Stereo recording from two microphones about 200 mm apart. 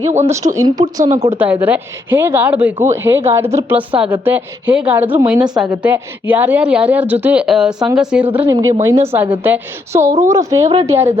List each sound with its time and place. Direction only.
0.3 s speech: 15° right (ahead or behind)